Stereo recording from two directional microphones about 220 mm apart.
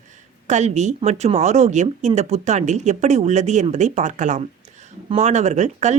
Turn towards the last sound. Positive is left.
turn(degrees=-30)  # may be behind; listen again after turning